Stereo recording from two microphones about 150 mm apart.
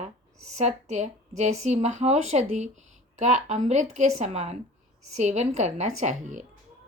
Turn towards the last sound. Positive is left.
turn(degrees=-55)  # may be behind; listen again after turning